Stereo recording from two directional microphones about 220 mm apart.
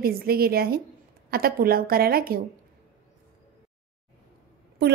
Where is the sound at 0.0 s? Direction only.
45° right (ahead or behind).